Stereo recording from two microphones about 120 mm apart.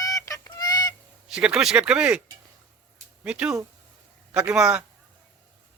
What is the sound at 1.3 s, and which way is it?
Speech, 5° right (ahead or behind).